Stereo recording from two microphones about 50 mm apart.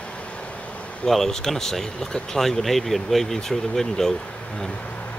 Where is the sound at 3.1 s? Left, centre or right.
Centre.